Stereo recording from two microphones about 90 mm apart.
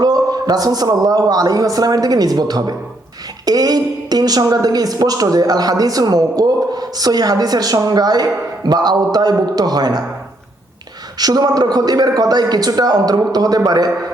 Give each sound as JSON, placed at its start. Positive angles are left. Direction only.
{"t": 0.0, "sound": "a woman's voice", "side_deg": -45}
{"t": 11.2, "sound": "a woman's voice", "side_deg": -45}